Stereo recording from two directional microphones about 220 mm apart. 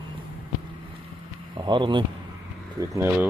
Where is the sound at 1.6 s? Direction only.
20° right (ahead or behind).